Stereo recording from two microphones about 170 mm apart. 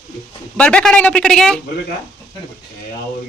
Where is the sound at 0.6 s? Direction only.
5° left (ahead or behind).